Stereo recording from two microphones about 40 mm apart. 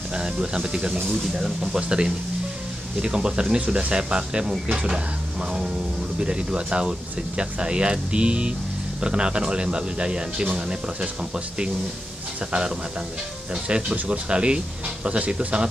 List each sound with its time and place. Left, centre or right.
0.1 s speech: right
13.5 s speech: right